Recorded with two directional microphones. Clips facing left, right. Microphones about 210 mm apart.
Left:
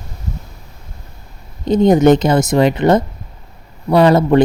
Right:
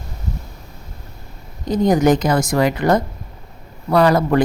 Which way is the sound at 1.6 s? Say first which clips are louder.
Left 5 dB; 25° left (ahead or behind).